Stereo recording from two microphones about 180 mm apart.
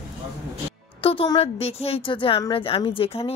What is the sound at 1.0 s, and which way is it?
Speech, 30° left (ahead or behind).